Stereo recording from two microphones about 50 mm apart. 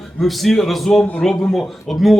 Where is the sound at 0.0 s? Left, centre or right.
Centre.